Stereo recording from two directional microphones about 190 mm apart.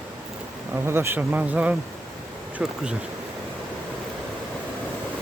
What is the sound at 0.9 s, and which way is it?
Speech, 10° right (ahead or behind).